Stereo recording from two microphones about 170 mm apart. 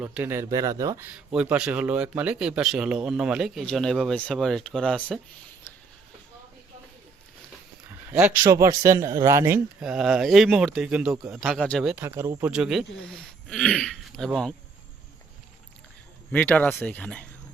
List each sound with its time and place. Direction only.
0.0 s speech: 10° right (ahead or behind); by 5.2 s 5° left (ahead or behind)
7.9 s a man's voice: 10° right (ahead or behind)
9.8 s speech: 5° right (ahead or behind)
12.0 s a man's voice: 15° right (ahead or behind)
12.5 s speech: 5° right (ahead or behind)
16.3 s speech: 10° left (ahead or behind)